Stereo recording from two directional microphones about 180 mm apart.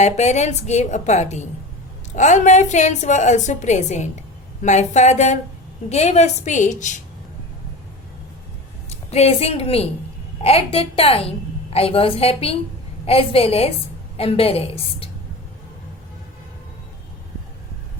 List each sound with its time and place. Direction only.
0.0 s a woman's voice: 40° left (ahead or behind)
8.9 s a woman's voice: 35° left (ahead or behind)